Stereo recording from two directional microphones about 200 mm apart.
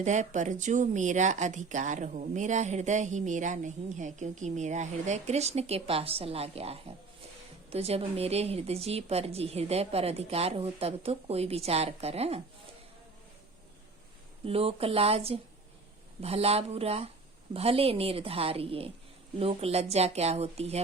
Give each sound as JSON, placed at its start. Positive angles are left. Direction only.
{"t": 0.0, "sound": "speech", "side_deg": -35}
{"t": 14.4, "sound": "a woman's voice", "side_deg": -30}